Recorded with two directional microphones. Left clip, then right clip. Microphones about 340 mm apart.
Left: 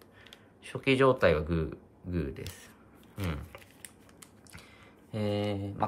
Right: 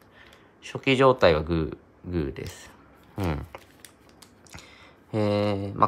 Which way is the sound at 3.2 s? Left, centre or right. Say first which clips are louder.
Right 8 dB; centre.